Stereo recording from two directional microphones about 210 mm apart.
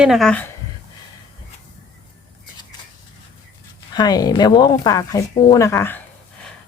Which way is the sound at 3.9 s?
20° left (ahead or behind).